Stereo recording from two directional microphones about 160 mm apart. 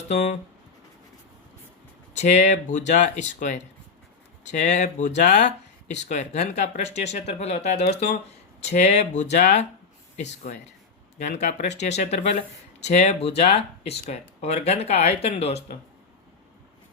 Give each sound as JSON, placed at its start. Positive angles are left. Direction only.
{"t": 0.1, "sound": "speech", "side_deg": 45}
{"t": 2.1, "sound": "speech", "side_deg": 45}
{"t": 4.6, "sound": "speech", "side_deg": 50}
{"t": 11.3, "sound": "speech", "side_deg": 45}